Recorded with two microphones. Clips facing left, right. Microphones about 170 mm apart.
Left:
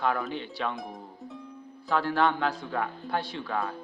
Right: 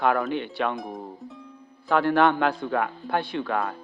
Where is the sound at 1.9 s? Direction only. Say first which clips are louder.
Right 5 dB; 60° right (ahead or behind).